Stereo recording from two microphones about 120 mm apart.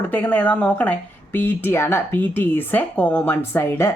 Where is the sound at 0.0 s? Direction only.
15° left (ahead or behind).